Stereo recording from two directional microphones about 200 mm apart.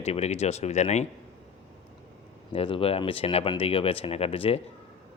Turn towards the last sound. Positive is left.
turn(degrees=30)  # may be behind; listen again after turning